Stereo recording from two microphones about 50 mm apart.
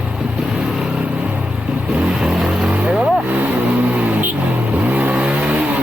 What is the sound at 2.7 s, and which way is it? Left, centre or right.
Vehicle, right.